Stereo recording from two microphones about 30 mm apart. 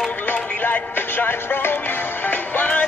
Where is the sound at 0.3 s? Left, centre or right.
Left.